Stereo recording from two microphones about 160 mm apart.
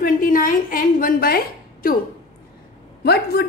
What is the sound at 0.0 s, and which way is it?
A woman's voice, 60° left (ahead or behind).